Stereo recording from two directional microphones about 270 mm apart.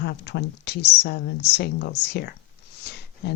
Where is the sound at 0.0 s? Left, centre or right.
Left.